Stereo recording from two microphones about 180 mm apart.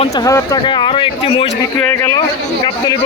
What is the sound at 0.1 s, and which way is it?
Speech, 20° left (ahead or behind).